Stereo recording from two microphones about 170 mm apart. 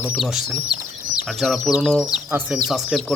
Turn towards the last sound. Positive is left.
turn(degrees=0)  # may be behind; listen again after turning